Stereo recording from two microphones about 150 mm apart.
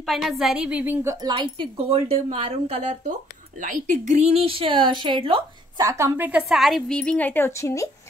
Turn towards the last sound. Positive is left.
turn(degrees=20)  # may be behind; listen again after turning